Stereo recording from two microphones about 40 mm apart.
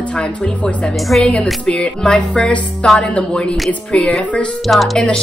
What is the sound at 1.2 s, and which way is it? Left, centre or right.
Speech, left.